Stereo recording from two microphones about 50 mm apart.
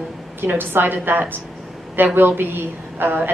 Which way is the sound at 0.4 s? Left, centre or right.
Right.